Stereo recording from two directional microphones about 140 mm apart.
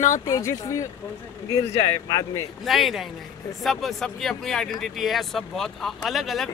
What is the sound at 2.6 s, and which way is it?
Speech, centre (ahead or behind).